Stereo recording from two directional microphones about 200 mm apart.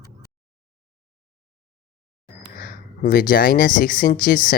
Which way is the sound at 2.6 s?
45° left (ahead or behind).